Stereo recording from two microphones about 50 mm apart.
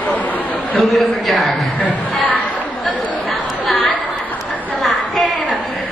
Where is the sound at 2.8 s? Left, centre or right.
Centre.